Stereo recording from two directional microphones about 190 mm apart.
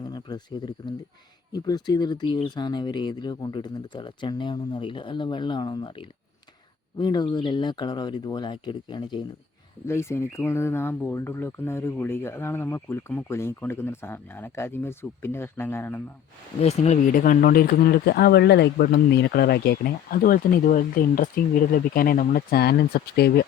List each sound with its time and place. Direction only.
0.0 s speech: 20° left (ahead or behind)
9.8 s speech: 15° left (ahead or behind)
16.6 s speech: 35° left (ahead or behind); by 23.5 s 55° left (ahead or behind)